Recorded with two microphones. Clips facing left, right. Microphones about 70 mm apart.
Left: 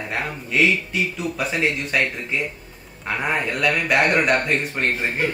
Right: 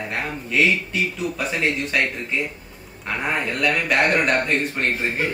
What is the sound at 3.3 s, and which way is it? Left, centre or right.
A man's voice, centre.